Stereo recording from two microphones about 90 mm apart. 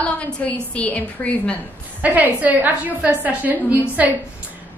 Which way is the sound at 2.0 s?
20° right (ahead or behind).